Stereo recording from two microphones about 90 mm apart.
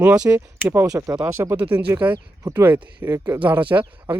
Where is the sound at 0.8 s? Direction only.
40° right (ahead or behind).